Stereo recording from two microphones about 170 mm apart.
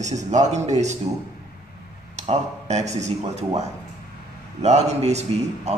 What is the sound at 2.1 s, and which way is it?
A man's voice, 40° right (ahead or behind).